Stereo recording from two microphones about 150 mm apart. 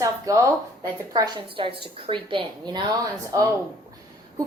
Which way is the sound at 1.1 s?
35° right (ahead or behind).